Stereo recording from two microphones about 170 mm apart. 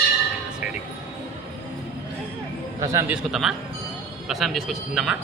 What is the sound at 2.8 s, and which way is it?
Speech, 15° right (ahead or behind).